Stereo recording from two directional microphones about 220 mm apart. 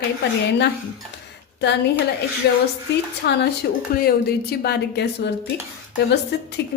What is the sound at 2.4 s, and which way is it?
A woman's voice, 50° left (ahead or behind).